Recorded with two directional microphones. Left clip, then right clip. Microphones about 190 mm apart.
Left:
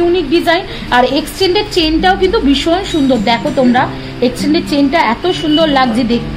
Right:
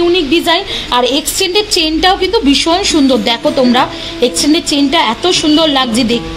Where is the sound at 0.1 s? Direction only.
40° right (ahead or behind).